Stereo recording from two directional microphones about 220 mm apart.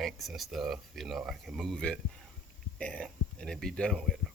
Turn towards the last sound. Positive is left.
turn(degrees=0)  # may be behind; listen again after turning